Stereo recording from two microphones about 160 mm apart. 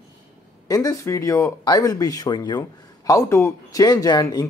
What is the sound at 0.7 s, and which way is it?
Speech, 20° left (ahead or behind).